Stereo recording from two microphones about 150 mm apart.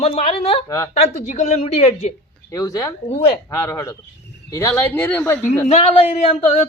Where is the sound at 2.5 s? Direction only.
25° left (ahead or behind).